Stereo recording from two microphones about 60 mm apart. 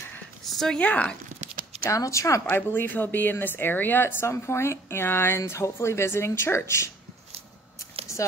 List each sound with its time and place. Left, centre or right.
0.5 s a sound: centre
0.7 s speech: left
1.9 s speech: left
2.4 s a woman's voice: left